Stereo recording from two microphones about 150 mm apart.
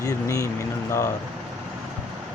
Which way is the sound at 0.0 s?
20° left (ahead or behind).